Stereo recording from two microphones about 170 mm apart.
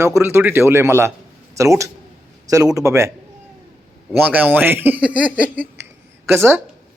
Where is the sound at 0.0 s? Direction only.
15° right (ahead or behind).